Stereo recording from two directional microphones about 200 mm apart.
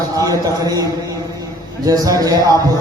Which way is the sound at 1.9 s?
15° right (ahead or behind).